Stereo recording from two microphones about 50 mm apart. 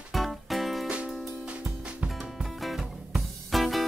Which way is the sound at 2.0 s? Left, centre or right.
Centre.